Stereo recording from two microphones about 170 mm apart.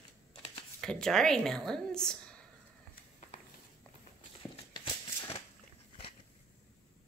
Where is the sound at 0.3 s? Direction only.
30° left (ahead or behind).